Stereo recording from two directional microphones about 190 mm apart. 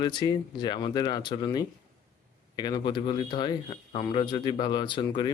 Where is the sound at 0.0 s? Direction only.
25° left (ahead or behind).